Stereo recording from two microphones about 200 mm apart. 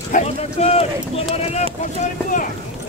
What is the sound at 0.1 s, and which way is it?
Speech, 30° left (ahead or behind).